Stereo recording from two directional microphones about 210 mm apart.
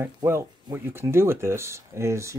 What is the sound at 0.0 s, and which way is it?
Speech, 10° right (ahead or behind).